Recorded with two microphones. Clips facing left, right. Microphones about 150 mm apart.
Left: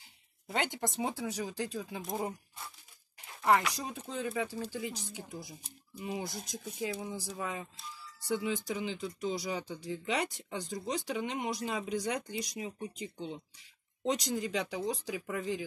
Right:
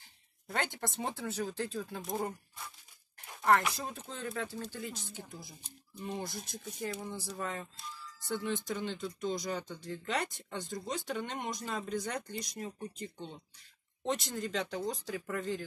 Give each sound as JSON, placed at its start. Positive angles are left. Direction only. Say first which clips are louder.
{"t": 0.6, "sound": "speech", "louder": "left 3 dB", "side_deg": 15}
{"t": 1.9, "sound": "speech", "louder": "even", "side_deg": 0}
{"t": 3.7, "sound": "speech", "louder": "left 3 dB", "side_deg": 15}